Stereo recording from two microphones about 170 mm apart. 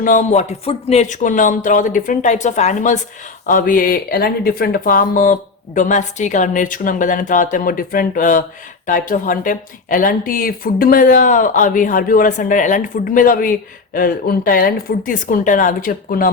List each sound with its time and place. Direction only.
0.0 s speech: 50° left (ahead or behind)